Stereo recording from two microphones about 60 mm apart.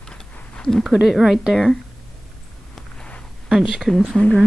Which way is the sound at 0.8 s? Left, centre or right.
Centre.